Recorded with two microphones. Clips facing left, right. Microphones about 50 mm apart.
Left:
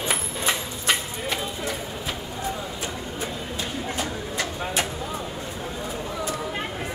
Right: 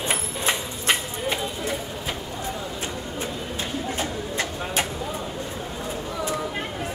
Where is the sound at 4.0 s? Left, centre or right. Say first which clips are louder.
Right 1 dB; right.